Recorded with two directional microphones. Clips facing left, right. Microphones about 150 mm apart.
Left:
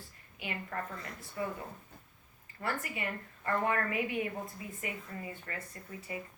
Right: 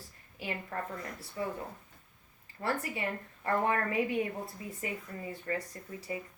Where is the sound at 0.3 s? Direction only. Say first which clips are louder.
Right 2 dB; 35° right (ahead or behind).